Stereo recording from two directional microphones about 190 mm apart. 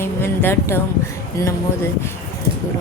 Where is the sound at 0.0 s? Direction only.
10° left (ahead or behind).